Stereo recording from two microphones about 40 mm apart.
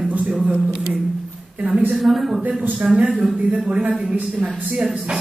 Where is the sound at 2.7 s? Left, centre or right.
Right.